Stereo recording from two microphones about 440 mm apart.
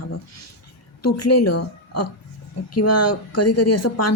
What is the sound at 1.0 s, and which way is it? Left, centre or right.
A woman's voice, left.